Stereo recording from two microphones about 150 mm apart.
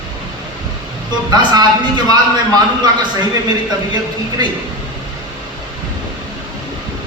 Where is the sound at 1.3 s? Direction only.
30° right (ahead or behind).